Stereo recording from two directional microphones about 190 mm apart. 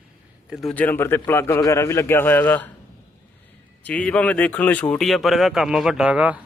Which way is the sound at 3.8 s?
5° left (ahead or behind).